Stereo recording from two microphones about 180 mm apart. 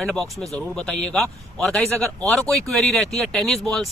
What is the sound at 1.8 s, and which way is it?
Speech, 15° right (ahead or behind).